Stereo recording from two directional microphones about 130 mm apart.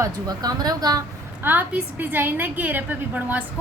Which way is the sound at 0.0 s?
30° right (ahead or behind).